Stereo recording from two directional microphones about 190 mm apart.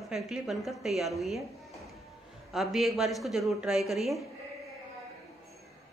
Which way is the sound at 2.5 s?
Centre (ahead or behind).